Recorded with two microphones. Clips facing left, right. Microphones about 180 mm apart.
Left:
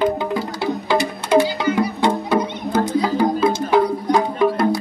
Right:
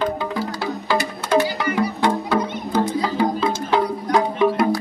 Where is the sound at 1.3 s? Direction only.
15° left (ahead or behind).